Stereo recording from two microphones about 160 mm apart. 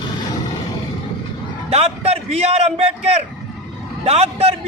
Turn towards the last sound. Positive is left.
turn(degrees=-40)  # may be behind; listen again after turning